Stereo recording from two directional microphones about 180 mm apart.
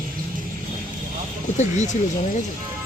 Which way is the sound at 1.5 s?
40° left (ahead or behind).